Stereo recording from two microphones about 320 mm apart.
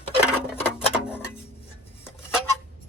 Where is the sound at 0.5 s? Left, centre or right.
Centre.